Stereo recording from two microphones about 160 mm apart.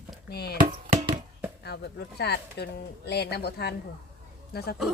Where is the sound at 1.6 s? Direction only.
90° left.